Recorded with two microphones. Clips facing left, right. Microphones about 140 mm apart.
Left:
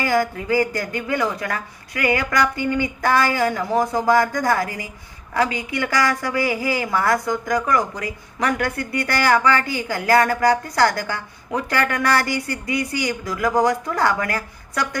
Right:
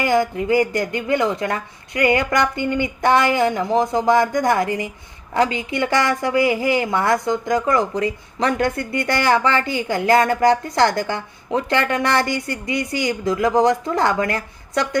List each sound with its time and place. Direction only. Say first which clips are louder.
0.0 s a woman's voice: right 2 dB; 20° right (ahead or behind)